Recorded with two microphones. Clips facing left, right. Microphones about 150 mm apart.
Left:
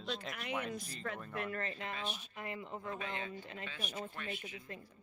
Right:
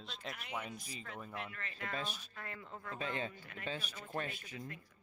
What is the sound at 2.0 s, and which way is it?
Speech, 40° right (ahead or behind).